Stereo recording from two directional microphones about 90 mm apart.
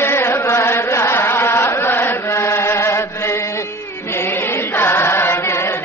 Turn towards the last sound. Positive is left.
turn(degrees=30)  # may be behind; listen again after turning